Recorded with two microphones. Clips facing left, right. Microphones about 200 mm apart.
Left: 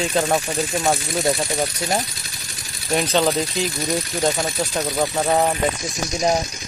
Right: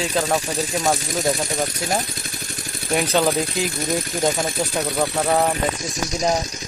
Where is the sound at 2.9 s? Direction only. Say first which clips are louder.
Even; 10° right (ahead or behind).